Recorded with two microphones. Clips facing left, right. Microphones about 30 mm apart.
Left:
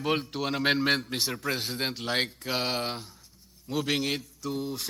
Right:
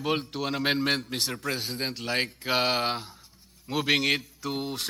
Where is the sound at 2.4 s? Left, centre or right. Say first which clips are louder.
Right 4 dB; centre.